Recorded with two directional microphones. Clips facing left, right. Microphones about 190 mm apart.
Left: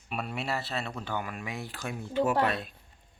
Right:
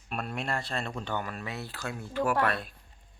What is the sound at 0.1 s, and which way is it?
Speech, 5° left (ahead or behind).